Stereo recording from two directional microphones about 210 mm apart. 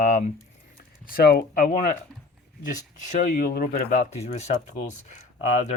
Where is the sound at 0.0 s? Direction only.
40° left (ahead or behind).